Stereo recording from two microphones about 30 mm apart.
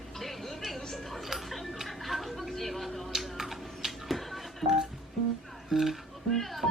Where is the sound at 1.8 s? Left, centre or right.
Centre.